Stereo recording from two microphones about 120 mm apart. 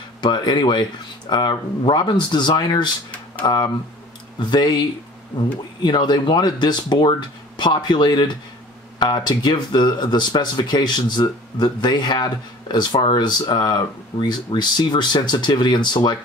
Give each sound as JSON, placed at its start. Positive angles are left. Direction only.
{"t": 0.2, "sound": "speech", "side_deg": 40}